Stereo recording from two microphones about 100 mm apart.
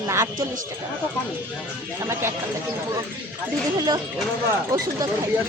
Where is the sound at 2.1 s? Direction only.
25° right (ahead or behind).